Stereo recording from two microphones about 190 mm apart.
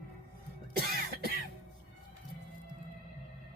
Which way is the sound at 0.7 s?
55° right (ahead or behind).